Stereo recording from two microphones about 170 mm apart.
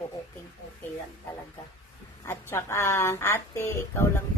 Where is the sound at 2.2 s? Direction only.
15° left (ahead or behind).